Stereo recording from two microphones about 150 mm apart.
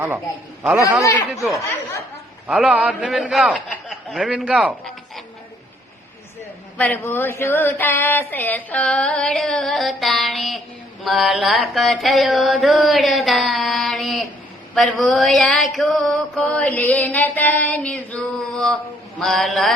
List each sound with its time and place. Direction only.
1.3 s mantra: 5° right (ahead or behind)
6.7 s a sound: 10° left (ahead or behind)
11.0 s mantra: centre (ahead or behind)